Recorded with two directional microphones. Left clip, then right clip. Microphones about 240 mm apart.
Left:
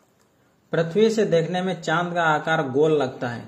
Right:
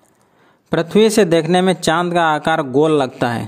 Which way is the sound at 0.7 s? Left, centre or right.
Right.